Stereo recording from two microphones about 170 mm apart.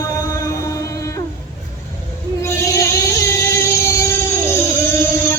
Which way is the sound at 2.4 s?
20° left (ahead or behind).